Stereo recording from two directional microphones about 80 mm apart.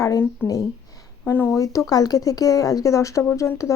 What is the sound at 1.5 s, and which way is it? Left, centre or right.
Speech, left.